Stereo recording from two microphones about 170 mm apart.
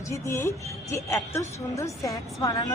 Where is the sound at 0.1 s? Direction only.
15° left (ahead or behind).